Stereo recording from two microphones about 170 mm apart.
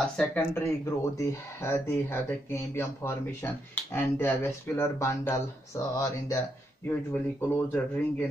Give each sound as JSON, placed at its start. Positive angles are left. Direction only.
{"t": 0.0, "sound": "speech", "side_deg": 5}
{"t": 0.8, "sound": "speech", "side_deg": 15}